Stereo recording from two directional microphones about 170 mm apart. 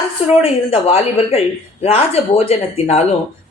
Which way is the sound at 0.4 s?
35° left (ahead or behind).